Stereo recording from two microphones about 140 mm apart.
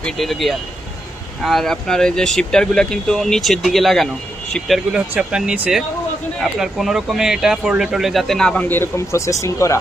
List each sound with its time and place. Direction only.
0.0 s speech: centre (ahead or behind); by 9.7 s 20° left (ahead or behind)